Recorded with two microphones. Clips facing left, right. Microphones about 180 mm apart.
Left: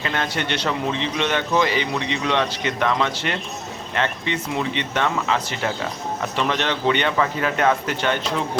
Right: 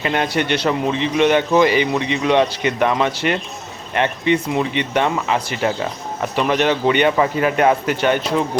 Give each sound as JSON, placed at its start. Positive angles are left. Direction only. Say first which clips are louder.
{"t": 0.0, "sound": "speech", "louder": "right 6 dB", "side_deg": -15}